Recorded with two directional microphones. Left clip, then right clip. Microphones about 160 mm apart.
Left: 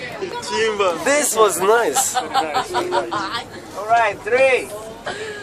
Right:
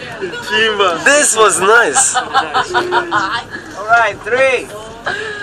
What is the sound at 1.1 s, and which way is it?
Speech, 5° left (ahead or behind).